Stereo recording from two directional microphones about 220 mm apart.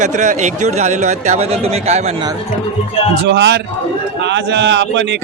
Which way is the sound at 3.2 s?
50° right (ahead or behind).